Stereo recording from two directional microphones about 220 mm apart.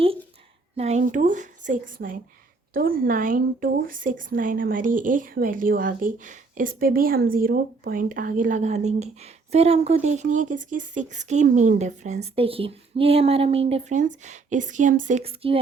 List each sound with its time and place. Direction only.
0.8 s speech: 30° right (ahead or behind)